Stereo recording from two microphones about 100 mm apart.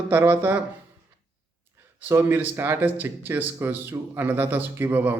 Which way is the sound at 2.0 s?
20° right (ahead or behind).